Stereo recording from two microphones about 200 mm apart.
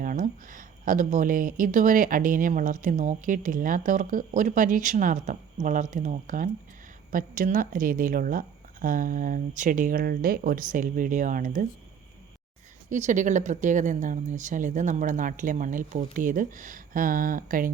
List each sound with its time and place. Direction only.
0.0 s speech: 40° right (ahead or behind)
12.9 s speech: 35° right (ahead or behind)